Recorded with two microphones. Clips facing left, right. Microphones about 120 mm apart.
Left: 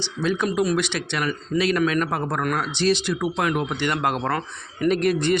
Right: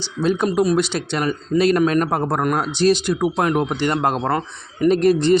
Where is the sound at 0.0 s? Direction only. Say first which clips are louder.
Right 4 dB; 35° right (ahead or behind).